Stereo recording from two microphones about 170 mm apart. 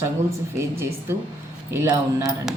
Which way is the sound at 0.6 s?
15° right (ahead or behind).